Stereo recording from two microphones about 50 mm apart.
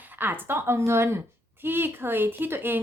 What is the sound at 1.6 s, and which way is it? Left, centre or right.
Speech, right.